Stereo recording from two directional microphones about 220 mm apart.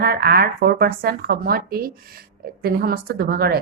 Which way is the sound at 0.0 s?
45° right (ahead or behind).